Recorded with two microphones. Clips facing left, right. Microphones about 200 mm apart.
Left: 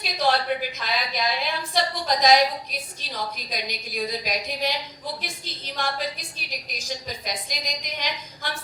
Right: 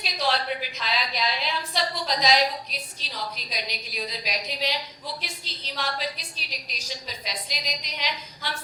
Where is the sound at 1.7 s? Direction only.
50° left (ahead or behind).